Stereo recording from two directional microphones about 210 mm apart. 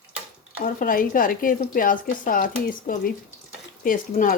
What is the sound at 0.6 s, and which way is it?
A woman's voice, 40° left (ahead or behind).